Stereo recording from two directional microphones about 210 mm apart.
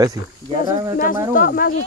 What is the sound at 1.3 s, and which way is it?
Speech, 45° left (ahead or behind).